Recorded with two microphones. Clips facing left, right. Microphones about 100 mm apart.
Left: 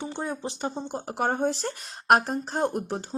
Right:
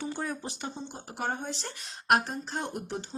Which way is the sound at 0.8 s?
45° left (ahead or behind).